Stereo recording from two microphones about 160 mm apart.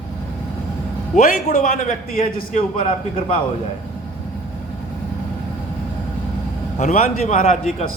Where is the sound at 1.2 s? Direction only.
50° left (ahead or behind).